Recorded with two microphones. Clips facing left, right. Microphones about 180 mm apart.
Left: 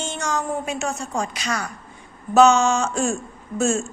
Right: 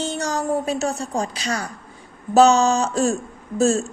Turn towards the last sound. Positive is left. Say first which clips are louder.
# right 3 dB
turn(degrees=-35)  # may be behind; listen again after turning